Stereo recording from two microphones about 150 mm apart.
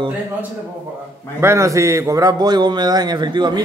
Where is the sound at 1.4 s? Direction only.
20° right (ahead or behind).